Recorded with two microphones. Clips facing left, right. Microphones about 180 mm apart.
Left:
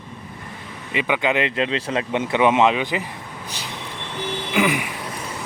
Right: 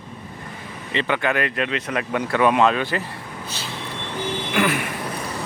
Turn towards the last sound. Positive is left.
turn(degrees=15)  # may be behind; listen again after turning